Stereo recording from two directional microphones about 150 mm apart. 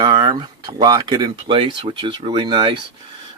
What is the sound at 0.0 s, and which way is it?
Speech, 30° right (ahead or behind).